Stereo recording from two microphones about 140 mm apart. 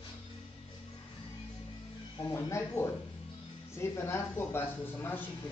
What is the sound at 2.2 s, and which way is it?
Speech, 20° left (ahead or behind).